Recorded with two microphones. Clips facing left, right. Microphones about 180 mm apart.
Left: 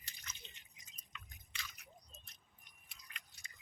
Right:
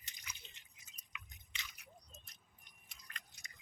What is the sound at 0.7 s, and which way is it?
Chewing, 10° right (ahead or behind).